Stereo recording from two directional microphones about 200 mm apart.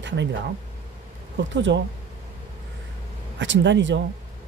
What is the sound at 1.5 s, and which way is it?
Speech, 65° right (ahead or behind).